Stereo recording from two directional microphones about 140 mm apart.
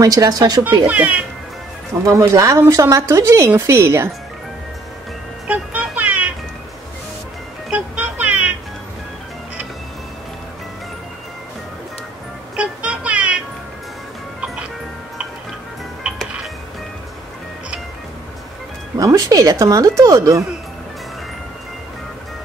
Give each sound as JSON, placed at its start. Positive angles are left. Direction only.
{"t": 0.0, "sound": "speech", "side_deg": -25}
{"t": 0.8, "sound": "speech", "side_deg": -10}
{"t": 2.0, "sound": "speech", "side_deg": -20}
{"t": 5.5, "sound": "music", "side_deg": -10}
{"t": 7.7, "sound": "music", "side_deg": -10}
{"t": 12.5, "sound": "music", "side_deg": -10}
{"t": 14.4, "sound": "music", "side_deg": -5}
{"t": 18.9, "sound": "speech", "side_deg": -25}